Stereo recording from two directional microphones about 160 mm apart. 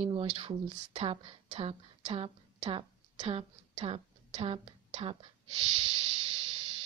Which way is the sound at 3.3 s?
40° right (ahead or behind).